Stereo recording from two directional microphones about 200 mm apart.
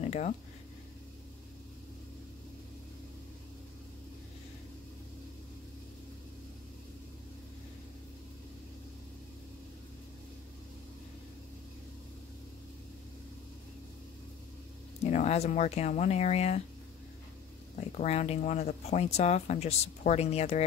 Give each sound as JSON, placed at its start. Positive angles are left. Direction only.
{"t": 0.0, "sound": "a sound", "side_deg": 35}
{"t": 15.0, "sound": "speech", "side_deg": 35}
{"t": 17.7, "sound": "speech", "side_deg": 35}